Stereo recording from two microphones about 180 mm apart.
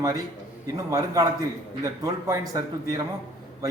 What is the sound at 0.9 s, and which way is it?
Speech, 20° right (ahead or behind).